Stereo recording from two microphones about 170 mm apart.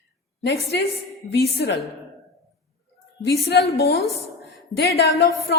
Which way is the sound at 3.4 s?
70° left (ahead or behind).